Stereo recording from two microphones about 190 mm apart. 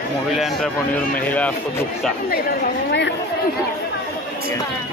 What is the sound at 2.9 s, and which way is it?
Speech, 65° left (ahead or behind).